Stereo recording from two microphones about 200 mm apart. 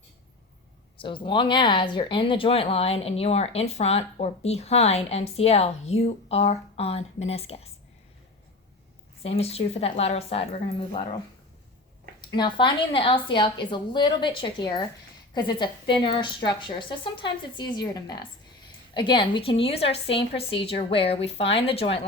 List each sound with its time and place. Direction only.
1.0 s speech: 25° left (ahead or behind)
9.2 s speech: 30° left (ahead or behind)
12.3 s a woman's voice: 25° left (ahead or behind)